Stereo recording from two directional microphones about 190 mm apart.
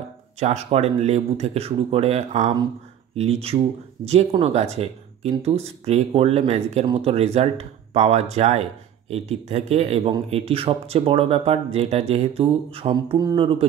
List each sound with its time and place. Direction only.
0.4 s speech: 35° right (ahead or behind)